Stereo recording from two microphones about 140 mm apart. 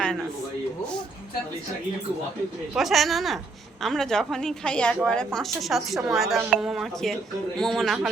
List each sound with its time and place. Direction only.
2.7 s a woman's voice: centre (ahead or behind)